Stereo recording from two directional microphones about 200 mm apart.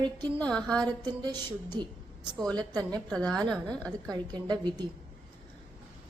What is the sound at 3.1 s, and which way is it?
Speech, 5° left (ahead or behind).